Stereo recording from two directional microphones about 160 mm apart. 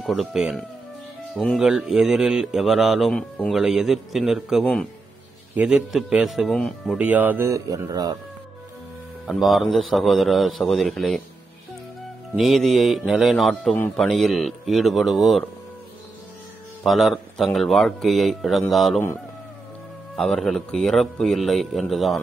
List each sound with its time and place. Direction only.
0.0 s speech: centre (ahead or behind)
7.0 s speech: 10° right (ahead or behind)
9.2 s speech: centre (ahead or behind)
12.4 s speech: centre (ahead or behind)
16.8 s speech: centre (ahead or behind)
20.2 s speech: centre (ahead or behind)